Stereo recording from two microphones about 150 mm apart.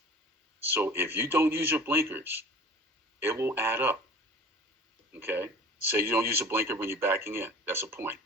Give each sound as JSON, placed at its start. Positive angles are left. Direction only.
{"t": 0.7, "sound": "speech", "side_deg": -15}
{"t": 5.1, "sound": "speech", "side_deg": -15}